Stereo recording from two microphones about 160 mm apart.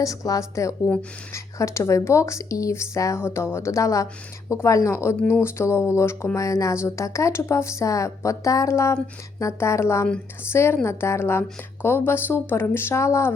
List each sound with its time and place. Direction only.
0.0 s speech: 20° left (ahead or behind)